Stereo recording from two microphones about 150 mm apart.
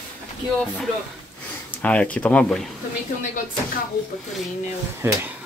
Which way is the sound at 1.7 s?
10° left (ahead or behind).